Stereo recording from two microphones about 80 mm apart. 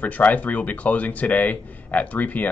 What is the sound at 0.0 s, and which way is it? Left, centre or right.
Speech, centre.